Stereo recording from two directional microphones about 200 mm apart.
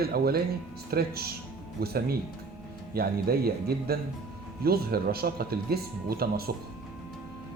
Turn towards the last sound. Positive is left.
turn(degrees=-50)  # may be behind; listen again after turning